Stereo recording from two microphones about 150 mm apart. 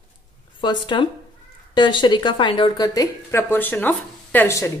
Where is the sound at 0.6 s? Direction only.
30° left (ahead or behind).